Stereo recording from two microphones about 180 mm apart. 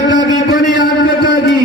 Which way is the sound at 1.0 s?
70° left (ahead or behind).